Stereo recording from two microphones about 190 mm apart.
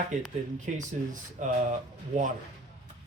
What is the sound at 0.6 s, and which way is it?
Speech, 40° right (ahead or behind).